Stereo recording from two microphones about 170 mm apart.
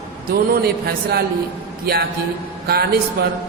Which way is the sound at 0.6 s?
65° right (ahead or behind).